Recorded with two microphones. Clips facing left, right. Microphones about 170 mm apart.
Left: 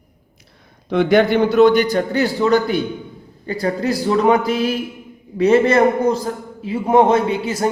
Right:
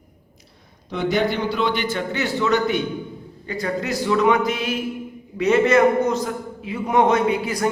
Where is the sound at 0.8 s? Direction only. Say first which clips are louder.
Left 7 dB; 60° left (ahead or behind).